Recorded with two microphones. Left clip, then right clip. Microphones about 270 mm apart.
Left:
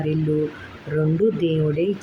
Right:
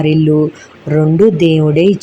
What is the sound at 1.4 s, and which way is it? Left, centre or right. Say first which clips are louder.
Speech: right 11 dB; centre.